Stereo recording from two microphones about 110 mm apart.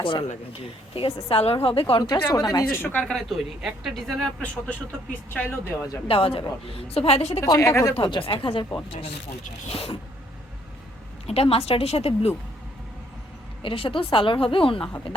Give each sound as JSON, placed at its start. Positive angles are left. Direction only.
{"t": 0.0, "sound": "a woman's voice", "side_deg": 50}
{"t": 2.3, "sound": "speech", "side_deg": 30}
{"t": 2.8, "sound": "speech", "side_deg": 10}
{"t": 6.1, "sound": "a woman's voice", "side_deg": 60}
{"t": 7.4, "sound": "speech", "side_deg": 30}
{"t": 8.0, "sound": "a woman's voice", "side_deg": 50}
{"t": 9.6, "sound": "a woman's voice", "side_deg": 65}
{"t": 11.3, "sound": "a woman's voice", "side_deg": 65}
{"t": 13.6, "sound": "a woman's voice", "side_deg": 55}